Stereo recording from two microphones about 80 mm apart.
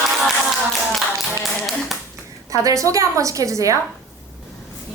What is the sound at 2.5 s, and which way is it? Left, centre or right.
A woman's voice, right.